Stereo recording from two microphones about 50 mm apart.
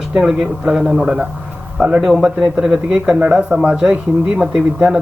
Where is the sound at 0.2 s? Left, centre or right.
Centre.